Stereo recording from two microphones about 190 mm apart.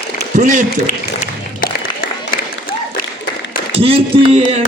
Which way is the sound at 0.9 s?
45° left (ahead or behind).